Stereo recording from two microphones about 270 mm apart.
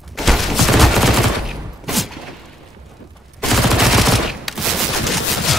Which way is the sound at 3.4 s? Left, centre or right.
Centre.